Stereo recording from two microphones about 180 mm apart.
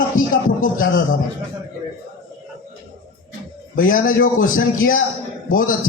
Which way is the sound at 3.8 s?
50° left (ahead or behind).